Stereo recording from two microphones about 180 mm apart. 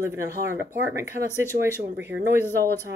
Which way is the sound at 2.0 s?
75° right (ahead or behind).